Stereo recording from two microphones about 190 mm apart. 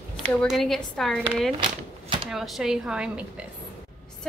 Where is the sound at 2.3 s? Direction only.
Centre (ahead or behind).